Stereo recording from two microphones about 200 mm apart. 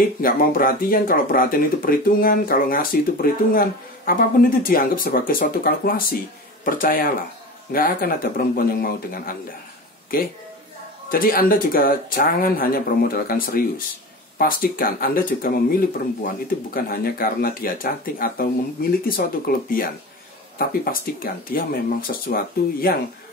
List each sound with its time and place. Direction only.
0.2 s speech: 45° left (ahead or behind)
11.1 s speech: 45° left (ahead or behind)